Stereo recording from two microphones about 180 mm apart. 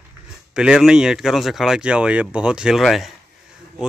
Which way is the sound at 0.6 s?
5° right (ahead or behind).